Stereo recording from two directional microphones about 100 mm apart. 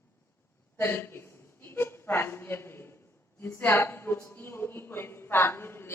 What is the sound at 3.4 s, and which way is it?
A woman's voice, 25° left (ahead or behind).